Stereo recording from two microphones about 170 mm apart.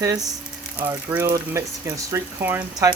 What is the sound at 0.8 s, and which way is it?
Speech, 10° right (ahead or behind).